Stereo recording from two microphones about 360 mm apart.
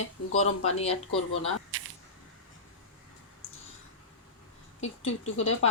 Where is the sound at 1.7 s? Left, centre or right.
Right.